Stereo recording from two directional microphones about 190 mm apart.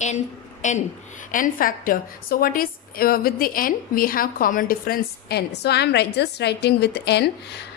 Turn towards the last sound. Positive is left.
turn(degrees=60)  # may be behind; listen again after turning